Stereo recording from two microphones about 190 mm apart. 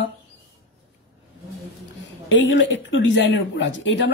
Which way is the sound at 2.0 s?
80° left.